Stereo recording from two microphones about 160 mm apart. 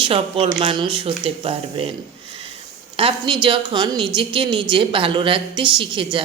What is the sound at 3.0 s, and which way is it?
Speech, 35° right (ahead or behind).